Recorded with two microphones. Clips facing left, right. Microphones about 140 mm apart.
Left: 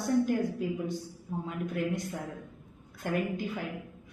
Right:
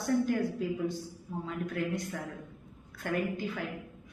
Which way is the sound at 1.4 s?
20° left (ahead or behind).